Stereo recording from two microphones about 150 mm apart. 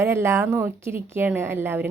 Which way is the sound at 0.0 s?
15° right (ahead or behind).